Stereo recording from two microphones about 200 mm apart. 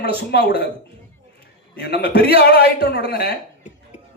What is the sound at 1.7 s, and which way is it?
A man's voice, 55° left (ahead or behind).